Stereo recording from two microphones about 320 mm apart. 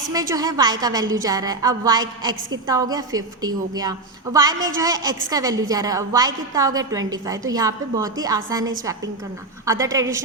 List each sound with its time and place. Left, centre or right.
0.1 s a woman's voice: centre
9.8 s a woman's voice: centre